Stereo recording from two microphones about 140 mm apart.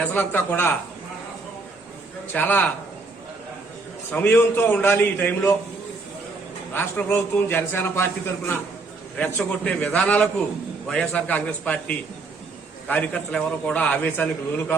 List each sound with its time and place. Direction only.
0.0 s a man's voice: 10° left (ahead or behind)
2.3 s a man's voice: 10° left (ahead or behind)
4.1 s a man's voice: 10° left (ahead or behind)
6.7 s a man's voice: 15° left (ahead or behind)